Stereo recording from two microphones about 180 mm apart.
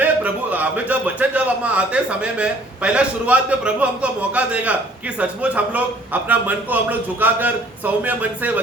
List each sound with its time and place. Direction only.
0.0 s a man's voice: 10° right (ahead or behind)